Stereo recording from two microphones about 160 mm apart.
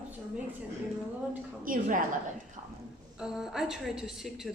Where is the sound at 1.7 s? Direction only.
60° right (ahead or behind).